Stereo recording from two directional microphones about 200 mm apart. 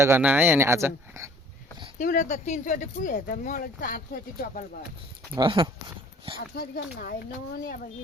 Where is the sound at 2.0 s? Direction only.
40° left (ahead or behind).